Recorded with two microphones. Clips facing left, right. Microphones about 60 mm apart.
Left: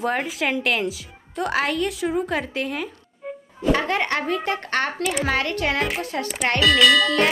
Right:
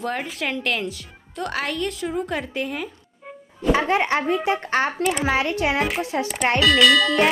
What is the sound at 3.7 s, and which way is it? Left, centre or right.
A child's voice, centre.